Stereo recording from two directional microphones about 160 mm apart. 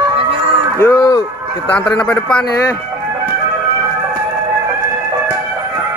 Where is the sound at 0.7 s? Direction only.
20° left (ahead or behind).